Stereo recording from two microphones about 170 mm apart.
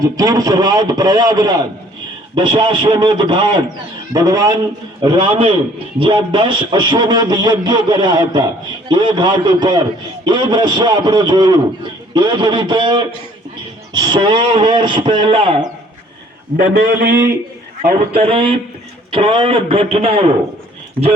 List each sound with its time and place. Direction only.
0.0 s a man's voice: 20° right (ahead or behind)
16.6 s a man's voice: 60° right (ahead or behind)
17.8 s speech: 35° right (ahead or behind)